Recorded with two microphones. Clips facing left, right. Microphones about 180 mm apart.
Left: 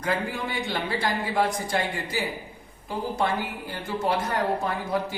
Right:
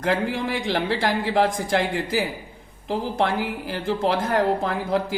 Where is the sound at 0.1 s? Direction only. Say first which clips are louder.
Right 4 dB; 90° right.